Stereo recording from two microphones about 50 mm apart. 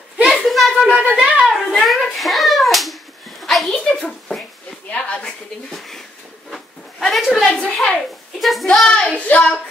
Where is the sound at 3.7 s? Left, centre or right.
Centre.